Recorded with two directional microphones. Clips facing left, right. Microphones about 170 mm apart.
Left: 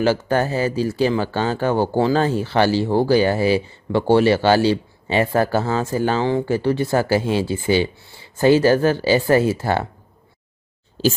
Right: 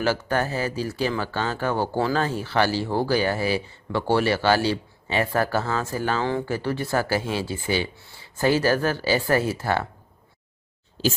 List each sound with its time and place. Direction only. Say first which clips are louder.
0.0 s speech: left 5 dB; 25° left (ahead or behind)